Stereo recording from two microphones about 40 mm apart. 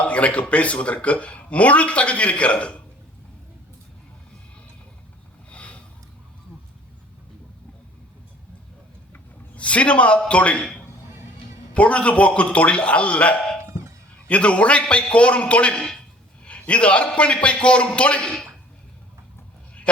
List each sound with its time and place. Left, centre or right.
0.0 s speech: left
5.5 s a sound: left
9.6 s speech: left
11.7 s a man's voice: left